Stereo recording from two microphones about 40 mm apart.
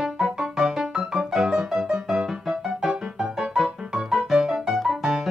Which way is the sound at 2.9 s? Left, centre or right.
Right.